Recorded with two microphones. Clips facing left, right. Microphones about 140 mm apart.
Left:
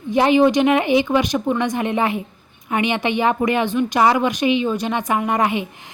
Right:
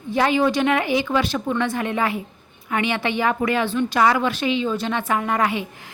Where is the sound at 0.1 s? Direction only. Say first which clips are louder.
Left 5 dB; 20° left (ahead or behind).